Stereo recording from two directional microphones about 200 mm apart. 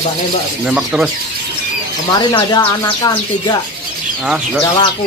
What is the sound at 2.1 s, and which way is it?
Speech, 20° left (ahead or behind).